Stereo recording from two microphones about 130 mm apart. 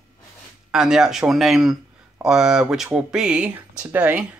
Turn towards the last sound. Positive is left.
turn(degrees=-10)  # may be behind; listen again after turning